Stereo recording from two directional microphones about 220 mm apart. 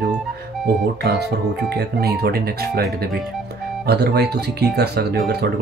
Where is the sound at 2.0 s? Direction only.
45° right (ahead or behind).